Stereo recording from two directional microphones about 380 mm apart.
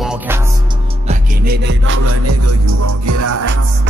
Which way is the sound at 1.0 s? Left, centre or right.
Right.